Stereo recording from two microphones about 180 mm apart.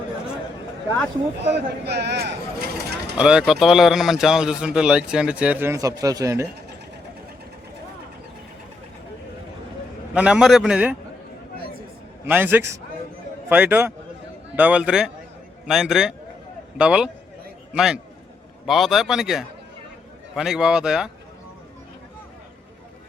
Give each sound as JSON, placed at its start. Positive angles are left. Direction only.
{"t": 1.5, "sound": "speech", "side_deg": -70}
{"t": 3.2, "sound": "a man's voice", "side_deg": -5}
{"t": 10.2, "sound": "a man's voice", "side_deg": -5}
{"t": 12.3, "sound": "a man's voice", "side_deg": -10}